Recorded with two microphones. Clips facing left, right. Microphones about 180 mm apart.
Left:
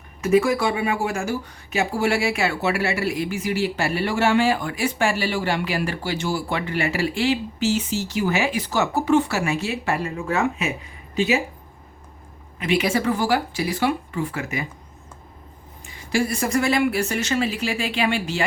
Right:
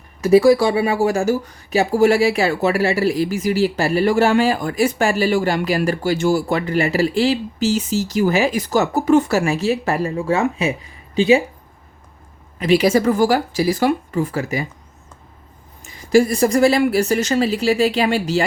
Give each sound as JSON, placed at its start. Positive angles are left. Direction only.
{"t": 0.2, "sound": "speech", "side_deg": -35}
{"t": 12.5, "sound": "speech", "side_deg": -35}
{"t": 15.8, "sound": "speech", "side_deg": -40}